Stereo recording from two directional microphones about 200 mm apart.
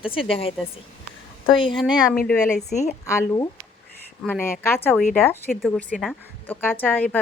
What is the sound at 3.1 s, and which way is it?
A woman's voice, 15° left (ahead or behind).